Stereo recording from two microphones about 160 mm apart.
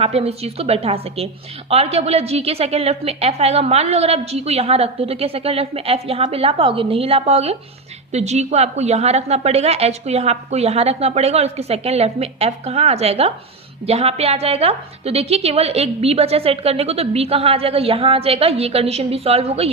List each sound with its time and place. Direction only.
0.0 s a woman's voice: 40° right (ahead or behind)